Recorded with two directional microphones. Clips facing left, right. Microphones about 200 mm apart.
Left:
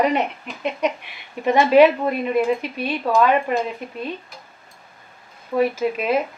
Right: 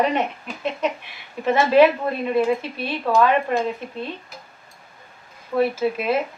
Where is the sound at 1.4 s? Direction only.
15° left (ahead or behind).